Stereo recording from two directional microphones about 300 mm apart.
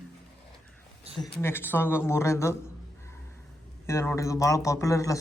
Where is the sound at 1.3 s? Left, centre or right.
Centre.